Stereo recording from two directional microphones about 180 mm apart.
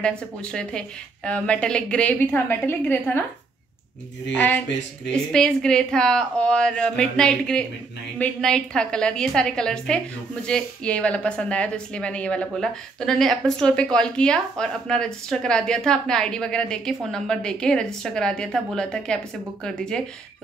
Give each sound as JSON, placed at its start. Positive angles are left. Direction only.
{"t": 0.0, "sound": "a woman's voice", "side_deg": 5}
{"t": 4.3, "sound": "speech", "side_deg": 5}
{"t": 4.6, "sound": "speech", "side_deg": 75}
{"t": 5.1, "sound": "a woman's voice", "side_deg": 5}